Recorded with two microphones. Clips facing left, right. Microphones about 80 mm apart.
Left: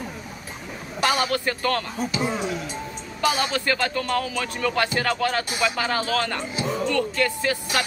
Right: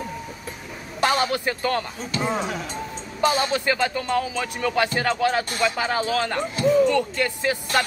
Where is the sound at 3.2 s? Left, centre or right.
Right.